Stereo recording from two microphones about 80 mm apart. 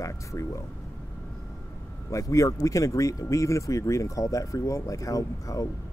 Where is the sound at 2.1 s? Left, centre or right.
Left.